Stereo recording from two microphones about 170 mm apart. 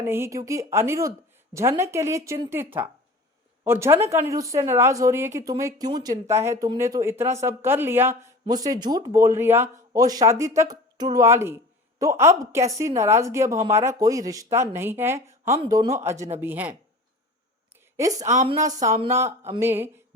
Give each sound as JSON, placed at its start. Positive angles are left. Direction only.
{"t": 0.0, "sound": "speech", "side_deg": -15}
{"t": 17.9, "sound": "a woman's voice", "side_deg": -20}